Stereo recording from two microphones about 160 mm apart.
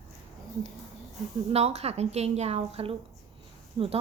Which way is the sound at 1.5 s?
40° right (ahead or behind).